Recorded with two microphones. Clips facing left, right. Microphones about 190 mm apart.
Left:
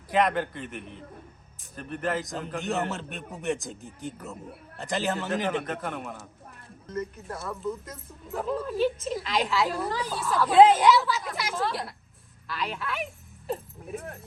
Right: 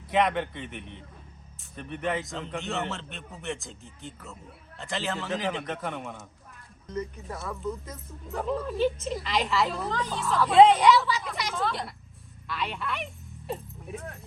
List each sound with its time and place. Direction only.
0.1 s speech: centre (ahead or behind)
5.1 s speech: centre (ahead or behind)
6.8 s speech: 10° right (ahead or behind)
7.2 s speech: centre (ahead or behind)